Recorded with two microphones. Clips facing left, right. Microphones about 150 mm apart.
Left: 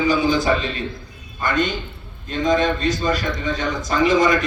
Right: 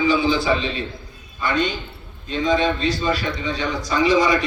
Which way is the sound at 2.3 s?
45° left (ahead or behind).